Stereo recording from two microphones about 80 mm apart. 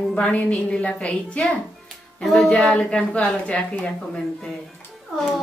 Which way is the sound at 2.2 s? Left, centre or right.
Centre.